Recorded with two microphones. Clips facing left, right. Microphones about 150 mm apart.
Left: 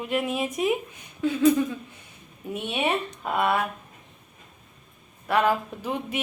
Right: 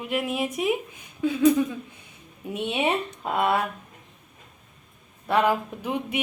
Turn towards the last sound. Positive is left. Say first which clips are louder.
# right 1 dB
turn(degrees=-15)  # may be behind; listen again after turning